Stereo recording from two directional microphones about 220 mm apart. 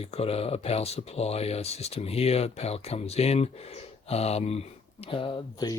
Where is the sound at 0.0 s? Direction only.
25° left (ahead or behind).